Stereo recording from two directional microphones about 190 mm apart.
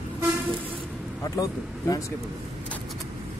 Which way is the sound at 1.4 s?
20° left (ahead or behind).